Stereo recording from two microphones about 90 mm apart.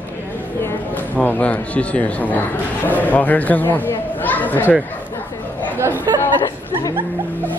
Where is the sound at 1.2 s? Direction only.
20° left (ahead or behind).